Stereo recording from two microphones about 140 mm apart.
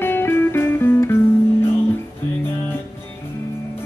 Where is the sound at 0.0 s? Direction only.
15° left (ahead or behind).